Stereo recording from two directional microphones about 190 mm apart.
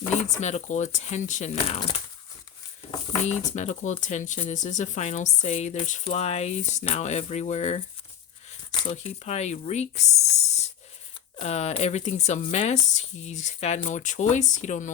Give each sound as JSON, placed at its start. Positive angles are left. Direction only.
{"t": 0.3, "sound": "speech", "side_deg": 40}
{"t": 3.5, "sound": "speech", "side_deg": 40}